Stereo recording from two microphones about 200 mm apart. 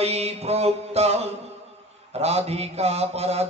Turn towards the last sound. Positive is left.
turn(degrees=-30)  # may be behind; listen again after turning